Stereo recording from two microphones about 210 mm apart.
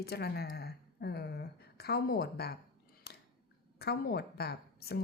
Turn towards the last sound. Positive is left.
turn(degrees=50)  # may be behind; listen again after turning